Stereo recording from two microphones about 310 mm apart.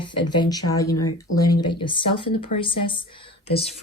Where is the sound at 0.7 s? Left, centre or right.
Centre.